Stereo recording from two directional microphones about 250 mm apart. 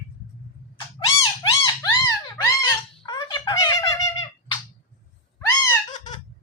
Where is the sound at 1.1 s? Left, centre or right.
Centre.